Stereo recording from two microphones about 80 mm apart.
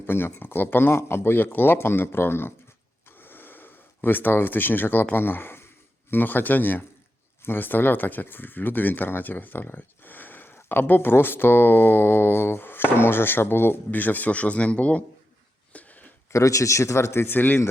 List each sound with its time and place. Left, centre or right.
0.0 s speech: left
3.1 s gasp: left
5.1 s speech: left
15.7 s a sound: centre
16.3 s speech: left